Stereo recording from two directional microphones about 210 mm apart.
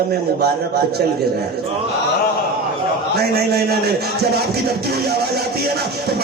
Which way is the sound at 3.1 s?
50° right (ahead or behind).